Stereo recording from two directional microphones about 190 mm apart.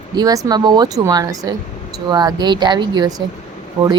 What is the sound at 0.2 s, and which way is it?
Speech, 20° right (ahead or behind).